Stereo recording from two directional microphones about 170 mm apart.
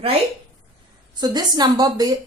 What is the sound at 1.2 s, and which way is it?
Speech, 25° right (ahead or behind).